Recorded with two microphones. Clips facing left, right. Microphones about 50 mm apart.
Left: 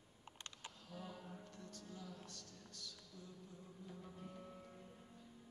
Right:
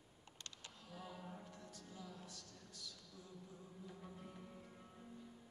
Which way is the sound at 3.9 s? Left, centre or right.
Centre.